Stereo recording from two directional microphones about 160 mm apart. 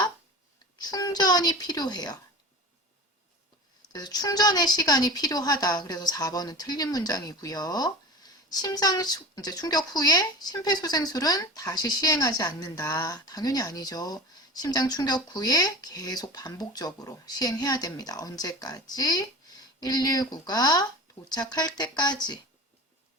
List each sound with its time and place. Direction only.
0.8 s speech: 25° left (ahead or behind)
3.9 s speech: 25° left (ahead or behind)